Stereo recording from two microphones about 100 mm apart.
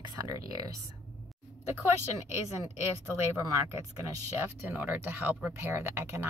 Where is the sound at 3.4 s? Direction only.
35° right (ahead or behind).